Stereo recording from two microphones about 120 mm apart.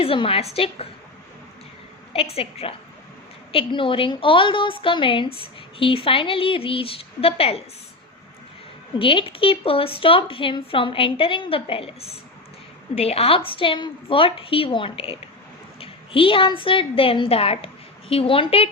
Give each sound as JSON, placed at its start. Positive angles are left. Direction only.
{"t": 0.0, "sound": "a woman's voice", "side_deg": 50}
{"t": 2.1, "sound": "a woman's voice", "side_deg": 55}
{"t": 9.0, "sound": "a woman's voice", "side_deg": 45}